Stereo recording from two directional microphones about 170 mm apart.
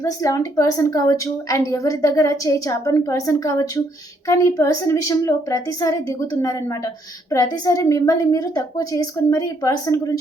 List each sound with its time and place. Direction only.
0.0 s a woman's voice: 20° left (ahead or behind)